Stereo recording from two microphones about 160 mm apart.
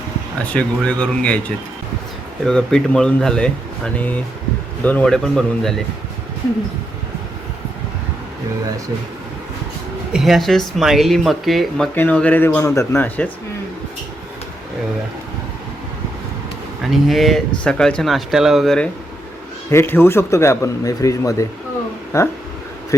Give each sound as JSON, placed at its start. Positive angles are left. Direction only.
{"t": 0.4, "sound": "a man's voice", "side_deg": 10}
{"t": 10.1, "sound": "speech", "side_deg": 0}
{"t": 11.9, "sound": "a man's voice", "side_deg": 10}
{"t": 16.8, "sound": "speech", "side_deg": 0}
{"t": 19.7, "sound": "a man's voice", "side_deg": 15}